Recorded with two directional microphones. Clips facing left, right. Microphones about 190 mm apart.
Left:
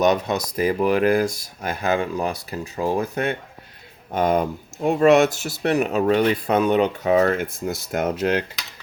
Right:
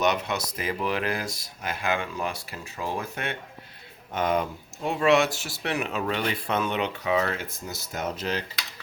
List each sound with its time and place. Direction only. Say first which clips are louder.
0.2 s speech: left 8 dB; 35° left (ahead or behind); by 8.4 s 55° left (ahead or behind)